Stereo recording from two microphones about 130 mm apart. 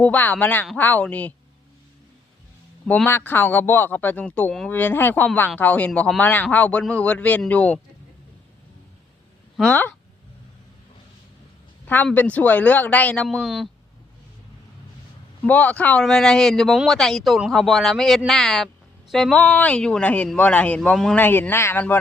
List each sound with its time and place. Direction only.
0.0 s speech: 10° left (ahead or behind)
2.8 s speech: 5° left (ahead or behind)
3.1 s speech: 15° left (ahead or behind)
9.6 s speech: 10° left (ahead or behind)
12.1 s speech: 10° left (ahead or behind)
13.2 s speech: centre (ahead or behind)
15.4 s speech: 10° left (ahead or behind)
21.2 s speech: 15° left (ahead or behind)